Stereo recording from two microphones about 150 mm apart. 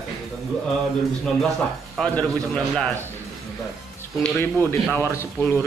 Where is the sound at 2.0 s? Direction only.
5° left (ahead or behind).